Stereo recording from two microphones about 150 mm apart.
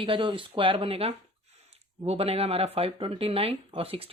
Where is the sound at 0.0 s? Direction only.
35° right (ahead or behind).